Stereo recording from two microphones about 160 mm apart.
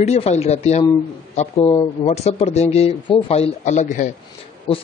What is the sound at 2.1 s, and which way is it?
Speech, 40° left (ahead or behind).